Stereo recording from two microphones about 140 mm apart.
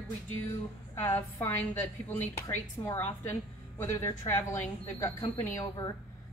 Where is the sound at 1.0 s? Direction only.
15° left (ahead or behind).